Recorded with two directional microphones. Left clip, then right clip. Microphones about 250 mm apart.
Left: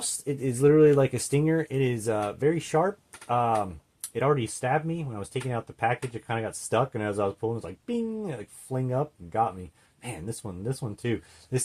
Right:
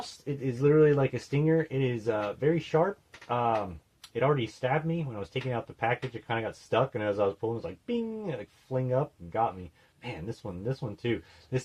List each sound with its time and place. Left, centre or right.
0.3 s speech: left